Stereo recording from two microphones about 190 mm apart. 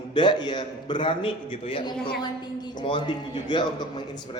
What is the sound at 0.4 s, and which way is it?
Speech, 25° left (ahead or behind).